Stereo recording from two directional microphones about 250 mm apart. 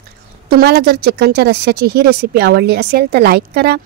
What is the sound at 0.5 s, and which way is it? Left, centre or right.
Speech, right.